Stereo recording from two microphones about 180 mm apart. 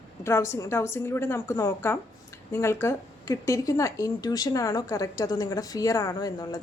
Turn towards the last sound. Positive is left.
turn(degrees=20)  # may be behind; listen again after turning